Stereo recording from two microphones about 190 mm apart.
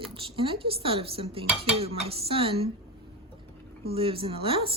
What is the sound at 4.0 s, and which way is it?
Dishes, 30° right (ahead or behind).